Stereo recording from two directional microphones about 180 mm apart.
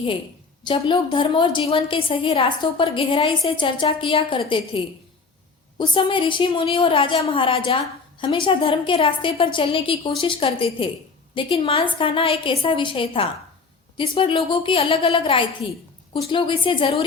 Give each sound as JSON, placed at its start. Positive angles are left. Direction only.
{"t": 0.6, "sound": "a woman's voice", "side_deg": 25}